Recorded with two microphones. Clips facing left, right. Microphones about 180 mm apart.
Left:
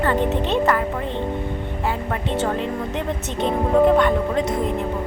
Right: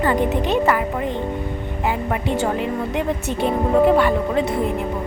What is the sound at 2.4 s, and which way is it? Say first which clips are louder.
Speech: right 2 dB; 10° right (ahead or behind).